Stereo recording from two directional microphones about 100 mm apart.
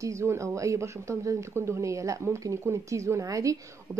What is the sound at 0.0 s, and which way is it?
Speech, 30° right (ahead or behind).